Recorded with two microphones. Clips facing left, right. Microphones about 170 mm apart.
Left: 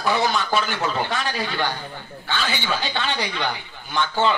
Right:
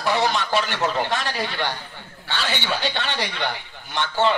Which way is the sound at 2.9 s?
70° right (ahead or behind).